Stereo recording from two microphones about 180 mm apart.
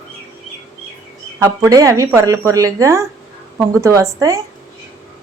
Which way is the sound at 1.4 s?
15° right (ahead or behind).